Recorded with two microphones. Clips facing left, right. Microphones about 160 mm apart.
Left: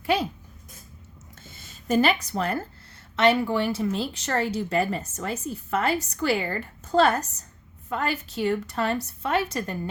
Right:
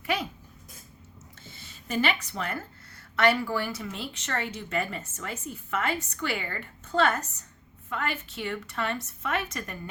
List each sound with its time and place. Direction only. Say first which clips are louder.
0.0 s a sound: left 6 dB; 30° left (ahead or behind)
1.5 s speech: left 10 dB; 45° left (ahead or behind)
3.2 s speech: left 4 dB; 25° left (ahead or behind)